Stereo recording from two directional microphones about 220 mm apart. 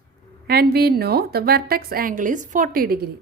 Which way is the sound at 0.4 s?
45° right (ahead or behind).